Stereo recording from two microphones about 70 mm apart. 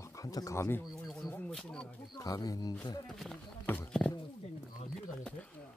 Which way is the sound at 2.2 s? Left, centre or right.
Left.